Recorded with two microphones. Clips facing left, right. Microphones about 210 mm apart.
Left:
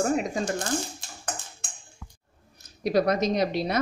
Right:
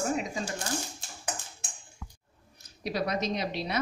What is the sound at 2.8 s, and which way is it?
Speech, 45° left (ahead or behind).